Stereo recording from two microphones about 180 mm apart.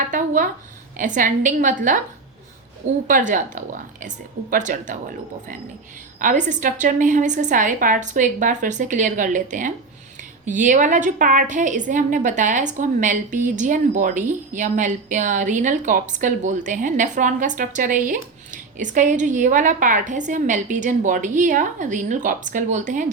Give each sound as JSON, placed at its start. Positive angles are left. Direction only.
{"t": 0.1, "sound": "a woman's voice", "side_deg": -45}
{"t": 3.1, "sound": "a woman's voice", "side_deg": -45}